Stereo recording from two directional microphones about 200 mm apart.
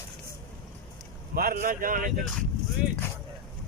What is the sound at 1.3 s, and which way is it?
Speech, 45° right (ahead or behind).